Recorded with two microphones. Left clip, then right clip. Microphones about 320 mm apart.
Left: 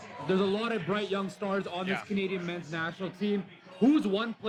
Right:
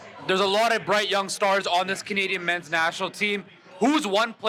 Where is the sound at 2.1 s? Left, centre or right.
Right.